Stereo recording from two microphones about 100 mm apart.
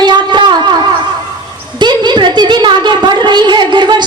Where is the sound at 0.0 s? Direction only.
50° right (ahead or behind).